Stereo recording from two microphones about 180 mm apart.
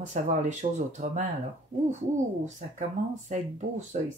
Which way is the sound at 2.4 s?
40° right (ahead or behind).